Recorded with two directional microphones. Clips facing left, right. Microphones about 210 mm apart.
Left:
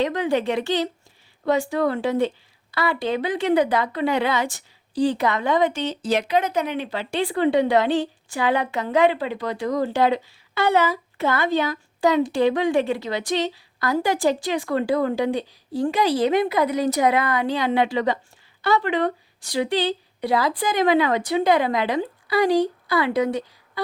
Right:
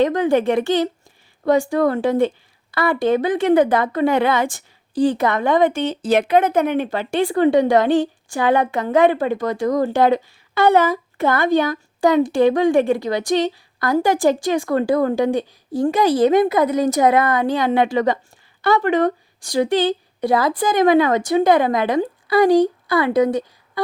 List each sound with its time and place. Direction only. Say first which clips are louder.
0.0 s speech: right 5 dB; 50° right (ahead or behind)